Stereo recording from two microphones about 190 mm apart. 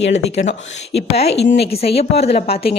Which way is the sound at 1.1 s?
35° left (ahead or behind).